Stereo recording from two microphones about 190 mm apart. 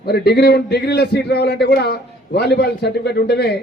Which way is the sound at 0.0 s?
55° left (ahead or behind).